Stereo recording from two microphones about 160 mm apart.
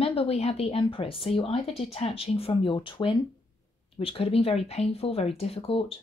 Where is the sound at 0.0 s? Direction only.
35° left (ahead or behind).